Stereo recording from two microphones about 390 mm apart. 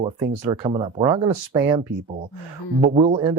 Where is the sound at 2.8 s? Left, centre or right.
Centre.